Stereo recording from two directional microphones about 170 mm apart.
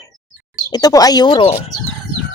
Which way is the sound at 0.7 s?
20° left (ahead or behind).